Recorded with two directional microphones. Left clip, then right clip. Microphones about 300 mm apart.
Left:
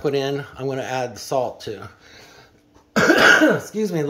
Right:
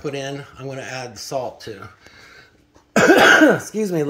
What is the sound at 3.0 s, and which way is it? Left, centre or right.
Throat clearing, centre.